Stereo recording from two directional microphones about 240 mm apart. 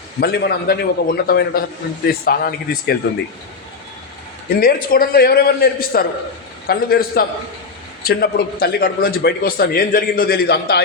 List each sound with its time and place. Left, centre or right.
0.2 s speech: left
4.4 s speech: left